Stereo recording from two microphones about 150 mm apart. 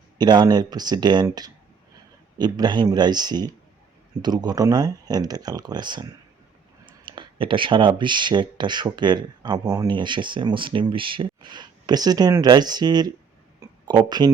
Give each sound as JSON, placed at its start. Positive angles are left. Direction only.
{"t": 0.2, "sound": "speech", "side_deg": -30}
{"t": 9.9, "sound": "speech", "side_deg": -30}
{"t": 13.6, "sound": "a sound", "side_deg": -30}